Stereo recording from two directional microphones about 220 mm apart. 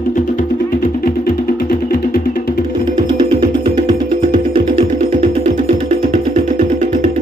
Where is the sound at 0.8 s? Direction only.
40° left (ahead or behind).